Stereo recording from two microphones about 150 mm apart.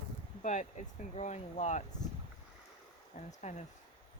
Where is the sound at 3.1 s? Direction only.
50° left (ahead or behind).